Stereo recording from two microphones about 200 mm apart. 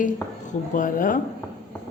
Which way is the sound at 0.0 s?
40° left (ahead or behind).